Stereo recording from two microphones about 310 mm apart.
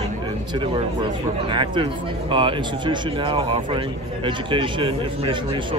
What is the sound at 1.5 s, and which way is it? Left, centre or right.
A man's voice, centre.